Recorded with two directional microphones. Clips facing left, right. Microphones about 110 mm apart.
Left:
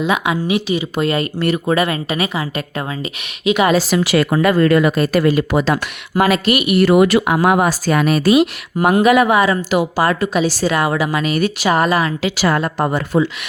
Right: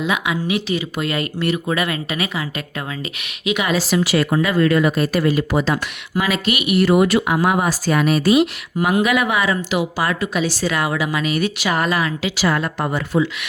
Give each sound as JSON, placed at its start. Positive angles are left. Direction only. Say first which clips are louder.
{"t": 0.0, "sound": "speech", "louder": "left 3 dB", "side_deg": 30}
{"t": 1.0, "sound": "speech", "louder": "left 5 dB", "side_deg": 30}
{"t": 3.9, "sound": "speech", "louder": "left 2 dB", "side_deg": 70}
{"t": 4.5, "sound": "speech", "louder": "left 2 dB", "side_deg": 45}
{"t": 4.8, "sound": "speech", "louder": "left 3 dB", "side_deg": 60}
{"t": 6.2, "sound": "speech", "louder": "left 6 dB", "side_deg": 45}
{"t": 6.8, "sound": "speech", "louder": "left 3 dB", "side_deg": 75}
{"t": 8.8, "sound": "speech", "louder": "left 5 dB", "side_deg": 45}